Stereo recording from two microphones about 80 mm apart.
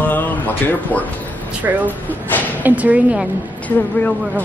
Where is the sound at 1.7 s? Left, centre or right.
Right.